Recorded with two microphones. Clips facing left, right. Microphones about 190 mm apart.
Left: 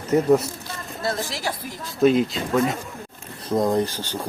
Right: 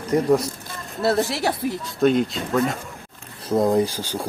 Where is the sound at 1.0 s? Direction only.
65° right (ahead or behind).